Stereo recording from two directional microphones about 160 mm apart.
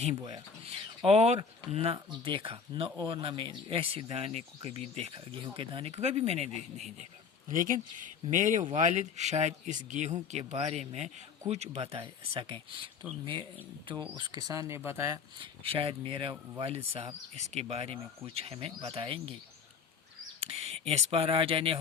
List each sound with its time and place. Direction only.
0.3 s speech: 35° right (ahead or behind)
7.4 s speech: 55° right (ahead or behind); by 15.2 s 20° right (ahead or behind)
15.4 s speech: 35° right (ahead or behind)
20.4 s speech: 40° right (ahead or behind)